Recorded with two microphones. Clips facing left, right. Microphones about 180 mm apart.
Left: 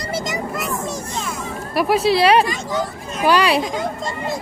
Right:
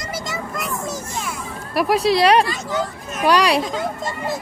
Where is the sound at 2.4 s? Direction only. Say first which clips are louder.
Left 1 dB; 15° left (ahead or behind).